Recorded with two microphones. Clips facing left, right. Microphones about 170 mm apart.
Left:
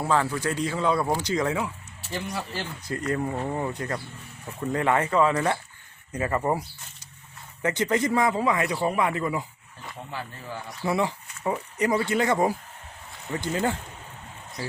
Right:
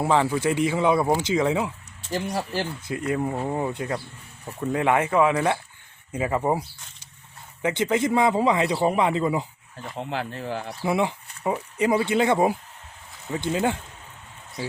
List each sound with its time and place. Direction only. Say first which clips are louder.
0.0 s speech: right 3 dB; 20° right (ahead or behind)
2.1 s speech: right 5 dB; 40° right (ahead or behind)
3.1 s speech: right 2 dB; 10° right (ahead or behind)
7.6 s speech: right 2 dB; 10° right (ahead or behind)
8.4 s speech: right 3 dB; 25° right (ahead or behind)
10.0 s speech: right 8 dB; 80° right
10.9 s speech: right 2 dB; 20° right (ahead or behind)